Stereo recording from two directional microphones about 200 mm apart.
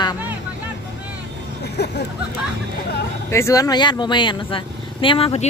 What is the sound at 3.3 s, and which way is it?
Speech, 15° left (ahead or behind).